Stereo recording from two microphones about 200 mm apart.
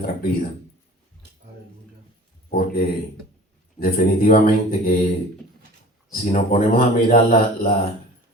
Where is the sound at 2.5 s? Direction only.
50° left (ahead or behind).